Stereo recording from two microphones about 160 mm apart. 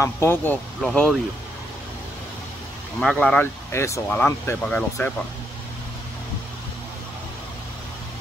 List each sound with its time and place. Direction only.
0.0 s speech: 15° left (ahead or behind)
3.0 s speech: 5° left (ahead or behind)
3.7 s speech: 15° left (ahead or behind)